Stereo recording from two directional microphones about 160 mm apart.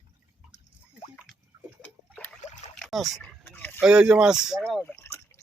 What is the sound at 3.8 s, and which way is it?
Speech, 5° right (ahead or behind).